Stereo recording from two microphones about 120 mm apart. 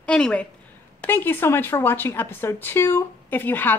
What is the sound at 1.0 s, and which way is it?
A woman's voice, 15° left (ahead or behind).